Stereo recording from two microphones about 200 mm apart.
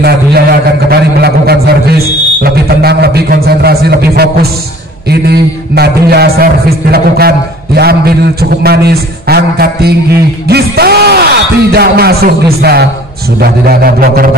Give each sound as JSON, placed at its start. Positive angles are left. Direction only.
{"t": 0.0, "sound": "a man's voice", "side_deg": -50}